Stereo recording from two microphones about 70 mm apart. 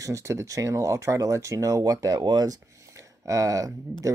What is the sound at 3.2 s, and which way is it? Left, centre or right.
Speech, right.